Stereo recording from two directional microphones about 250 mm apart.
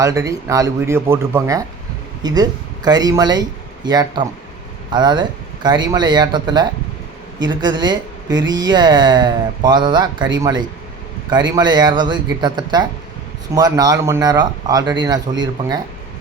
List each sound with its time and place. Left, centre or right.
0.0 s speech: centre